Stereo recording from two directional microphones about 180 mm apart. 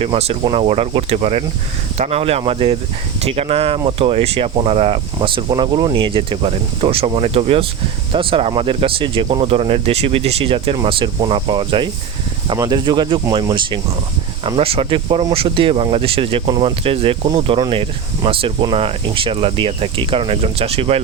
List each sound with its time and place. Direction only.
0.0 s speech: 35° right (ahead or behind)